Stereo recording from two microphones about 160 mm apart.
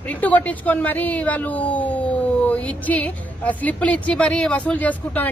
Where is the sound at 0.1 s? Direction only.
10° left (ahead or behind).